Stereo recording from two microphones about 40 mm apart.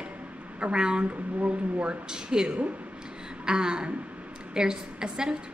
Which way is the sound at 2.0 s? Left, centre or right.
Centre.